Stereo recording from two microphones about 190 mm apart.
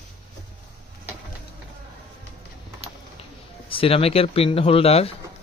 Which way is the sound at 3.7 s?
30° left (ahead or behind).